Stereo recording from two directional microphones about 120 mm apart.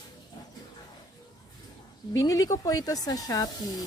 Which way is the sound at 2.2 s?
30° left (ahead or behind).